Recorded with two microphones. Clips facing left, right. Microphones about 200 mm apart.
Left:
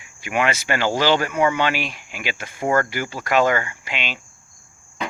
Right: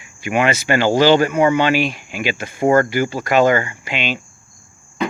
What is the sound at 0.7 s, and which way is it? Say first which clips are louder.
Speech: right 8 dB; 35° right (ahead or behind).